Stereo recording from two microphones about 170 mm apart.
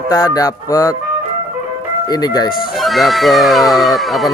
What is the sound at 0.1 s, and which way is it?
Speech, 20° left (ahead or behind).